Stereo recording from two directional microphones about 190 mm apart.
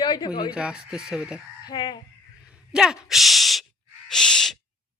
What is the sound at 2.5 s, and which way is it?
Speech, 5° right (ahead or behind).